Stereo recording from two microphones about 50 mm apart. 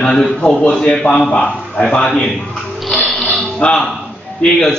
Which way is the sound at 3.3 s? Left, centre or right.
Left.